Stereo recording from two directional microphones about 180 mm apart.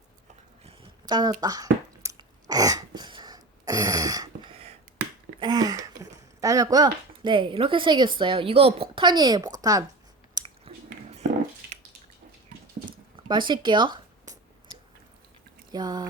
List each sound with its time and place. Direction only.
0.6 s a sound: 30° right (ahead or behind)
2.0 s throat clearing: 20° right (ahead or behind)
5.4 s speech: 20° right (ahead or behind)
10.4 s chewing: 20° right (ahead or behind)
13.2 s a sound: 25° right (ahead or behind)
15.7 s speech: 20° right (ahead or behind)